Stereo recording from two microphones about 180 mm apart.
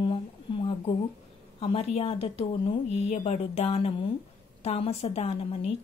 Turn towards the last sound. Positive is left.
turn(degrees=35)  # may be behind; listen again after turning